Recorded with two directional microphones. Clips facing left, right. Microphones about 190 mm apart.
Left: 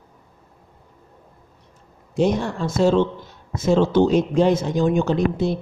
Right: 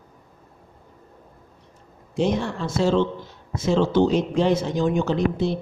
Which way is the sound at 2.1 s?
45° left (ahead or behind).